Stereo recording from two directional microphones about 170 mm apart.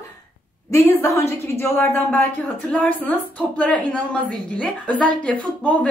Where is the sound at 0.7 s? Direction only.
15° left (ahead or behind).